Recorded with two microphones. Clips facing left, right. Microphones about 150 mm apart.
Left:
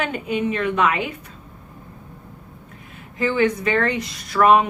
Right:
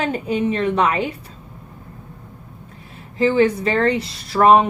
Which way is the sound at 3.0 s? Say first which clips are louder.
Right 4 dB; 30° right (ahead or behind).